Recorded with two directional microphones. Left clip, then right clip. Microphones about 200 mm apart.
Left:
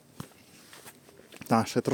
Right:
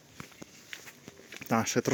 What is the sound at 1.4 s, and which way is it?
Speech, 20° left (ahead or behind).